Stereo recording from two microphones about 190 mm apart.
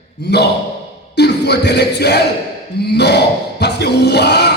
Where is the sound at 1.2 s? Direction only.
60° left (ahead or behind).